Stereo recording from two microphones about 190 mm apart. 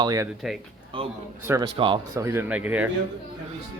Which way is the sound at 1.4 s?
15° right (ahead or behind).